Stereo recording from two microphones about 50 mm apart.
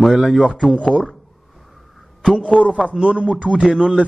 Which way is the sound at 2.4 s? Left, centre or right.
Left.